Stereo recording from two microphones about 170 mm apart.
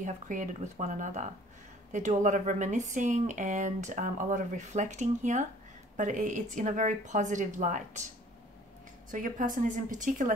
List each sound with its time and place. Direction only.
0.0 s speech: 45° right (ahead or behind)
9.1 s speech: 50° right (ahead or behind)